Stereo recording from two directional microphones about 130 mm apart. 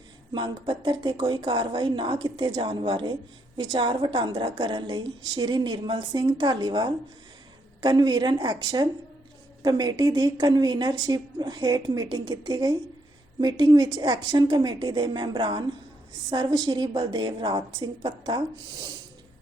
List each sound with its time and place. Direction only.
0.3 s a woman's voice: 35° right (ahead or behind)